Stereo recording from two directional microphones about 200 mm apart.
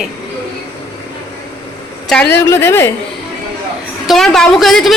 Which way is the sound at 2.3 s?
10° left (ahead or behind).